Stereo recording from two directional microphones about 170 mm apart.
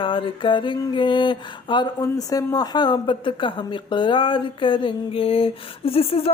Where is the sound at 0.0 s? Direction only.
30° left (ahead or behind).